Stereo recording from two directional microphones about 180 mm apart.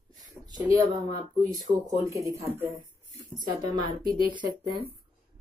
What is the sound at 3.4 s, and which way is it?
Speech, 25° right (ahead or behind).